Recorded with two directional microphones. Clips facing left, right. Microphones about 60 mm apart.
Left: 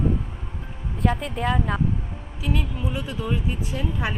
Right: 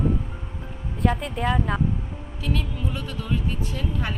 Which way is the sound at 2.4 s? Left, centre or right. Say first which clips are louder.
Left 1 dB; centre.